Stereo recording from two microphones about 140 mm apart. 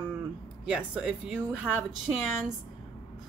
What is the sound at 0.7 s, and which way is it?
Speech, 10° right (ahead or behind).